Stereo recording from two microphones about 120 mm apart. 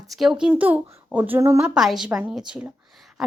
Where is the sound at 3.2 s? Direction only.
5° right (ahead or behind).